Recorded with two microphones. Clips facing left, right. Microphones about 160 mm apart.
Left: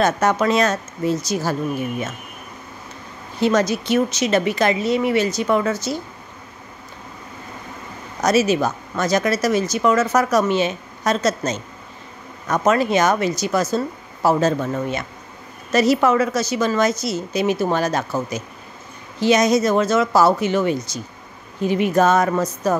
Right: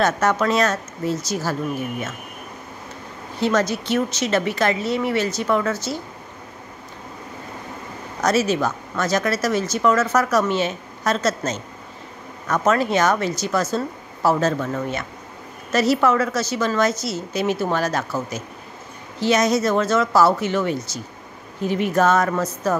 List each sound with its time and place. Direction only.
0.0 s speech: 15° left (ahead or behind)
3.3 s speech: 15° left (ahead or behind)
8.2 s speech: 10° left (ahead or behind)